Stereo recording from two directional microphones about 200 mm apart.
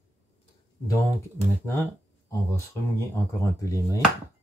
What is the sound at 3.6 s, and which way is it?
Speech, 15° left (ahead or behind).